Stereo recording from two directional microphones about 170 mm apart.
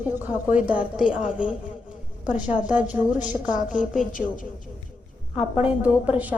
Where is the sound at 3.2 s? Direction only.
50° left (ahead or behind).